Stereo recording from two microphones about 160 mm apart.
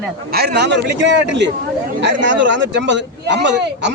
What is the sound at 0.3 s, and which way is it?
Speech, 75° right (ahead or behind).